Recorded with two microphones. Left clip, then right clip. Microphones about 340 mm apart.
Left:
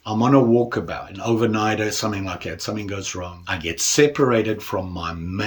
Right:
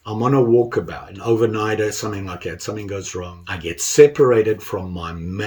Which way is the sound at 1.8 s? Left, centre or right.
Left.